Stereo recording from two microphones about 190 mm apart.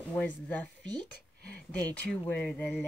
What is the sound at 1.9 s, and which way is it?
Speech, 5° left (ahead or behind).